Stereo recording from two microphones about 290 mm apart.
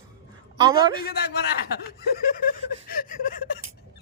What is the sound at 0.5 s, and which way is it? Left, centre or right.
Speech, centre.